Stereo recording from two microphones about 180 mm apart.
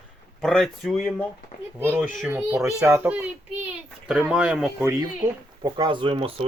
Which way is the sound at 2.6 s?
Centre (ahead or behind).